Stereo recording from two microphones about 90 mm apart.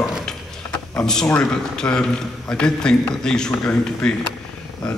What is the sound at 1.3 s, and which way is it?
A man's voice, 10° left (ahead or behind).